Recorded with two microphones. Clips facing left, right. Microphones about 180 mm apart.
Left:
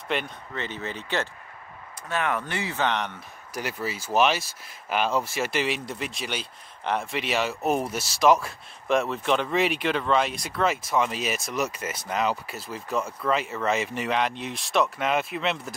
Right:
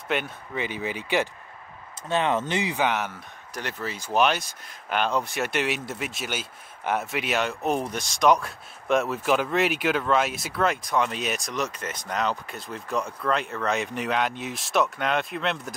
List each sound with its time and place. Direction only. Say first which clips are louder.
0.1 s speech: right 1 dB; 5° right (ahead or behind)
2.0 s speech: right 4 dB; 25° right (ahead or behind); by 3.2 s 5° right (ahead or behind)
3.5 s speech: left 2 dB; 10° left (ahead or behind)